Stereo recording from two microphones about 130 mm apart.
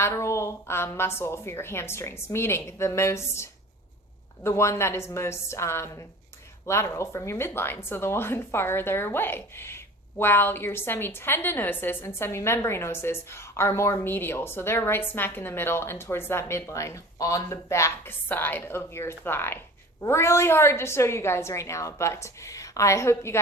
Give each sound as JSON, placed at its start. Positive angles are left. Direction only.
{"t": 0.0, "sound": "a woman's voice", "side_deg": 20}